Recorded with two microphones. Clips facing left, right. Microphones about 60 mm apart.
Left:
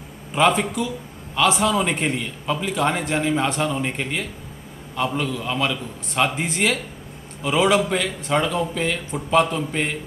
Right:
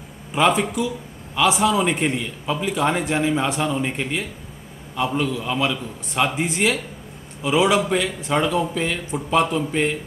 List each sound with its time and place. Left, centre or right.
0.3 s a man's voice: centre